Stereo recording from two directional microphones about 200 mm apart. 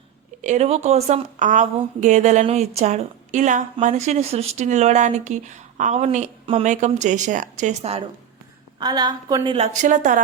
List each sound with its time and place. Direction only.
0.4 s a woman's voice: 35° right (ahead or behind)
8.8 s a woman's voice: 20° right (ahead or behind)
9.6 s a woman's voice: 40° right (ahead or behind)